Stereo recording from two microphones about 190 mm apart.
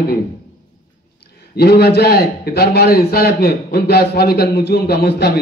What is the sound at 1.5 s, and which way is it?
A man's voice, 55° left (ahead or behind).